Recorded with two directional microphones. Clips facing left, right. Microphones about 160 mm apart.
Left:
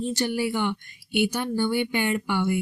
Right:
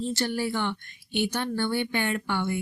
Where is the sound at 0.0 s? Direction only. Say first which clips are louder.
Left 2 dB; 15° left (ahead or behind).